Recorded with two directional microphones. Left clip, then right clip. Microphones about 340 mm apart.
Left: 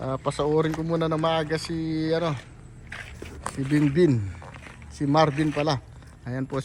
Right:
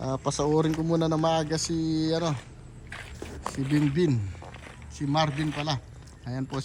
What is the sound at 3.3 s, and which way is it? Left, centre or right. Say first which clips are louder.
Speech: left 2 dB; centre.